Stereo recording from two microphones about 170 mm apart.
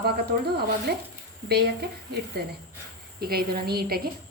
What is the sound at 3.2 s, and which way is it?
Speech, 65° right (ahead or behind).